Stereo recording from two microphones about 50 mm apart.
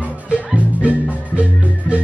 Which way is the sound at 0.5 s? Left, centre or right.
Right.